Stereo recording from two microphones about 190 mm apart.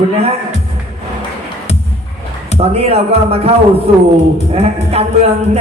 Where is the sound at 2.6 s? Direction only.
35° right (ahead or behind).